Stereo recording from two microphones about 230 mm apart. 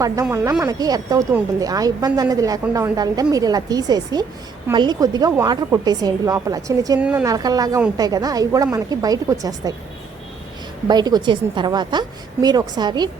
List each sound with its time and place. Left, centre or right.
0.0 s a woman's voice: centre
10.8 s a woman's voice: centre